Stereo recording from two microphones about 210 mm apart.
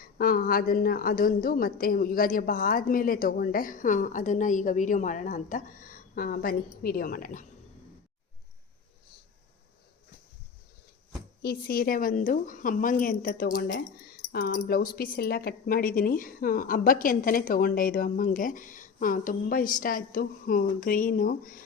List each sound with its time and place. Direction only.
0.0 s a woman's voice: 45° left (ahead or behind)
11.4 s a woman's voice: 45° left (ahead or behind)